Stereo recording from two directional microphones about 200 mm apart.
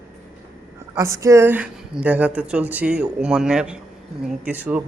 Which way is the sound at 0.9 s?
15° right (ahead or behind).